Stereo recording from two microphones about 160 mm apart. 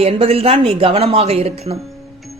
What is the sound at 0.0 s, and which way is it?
Speech, 35° right (ahead or behind).